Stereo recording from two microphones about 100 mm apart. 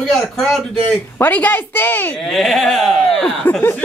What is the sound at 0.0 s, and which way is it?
Speech, centre (ahead or behind).